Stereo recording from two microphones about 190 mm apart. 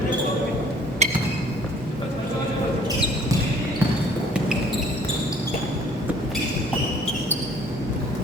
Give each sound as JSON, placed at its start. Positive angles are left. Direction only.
{"t": 1.0, "sound": "wood block", "side_deg": -35}